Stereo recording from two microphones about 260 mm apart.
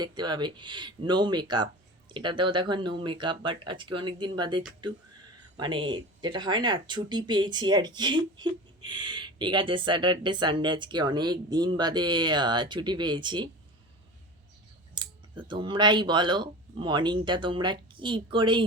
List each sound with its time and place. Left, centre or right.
0.0 s speech: centre
14.9 s speech: centre